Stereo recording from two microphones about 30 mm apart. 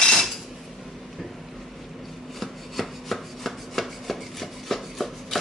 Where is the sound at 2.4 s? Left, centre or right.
Centre.